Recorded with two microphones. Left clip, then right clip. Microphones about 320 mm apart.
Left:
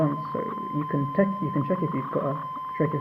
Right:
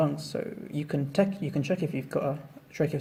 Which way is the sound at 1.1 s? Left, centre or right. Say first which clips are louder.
Left 1 dB; right.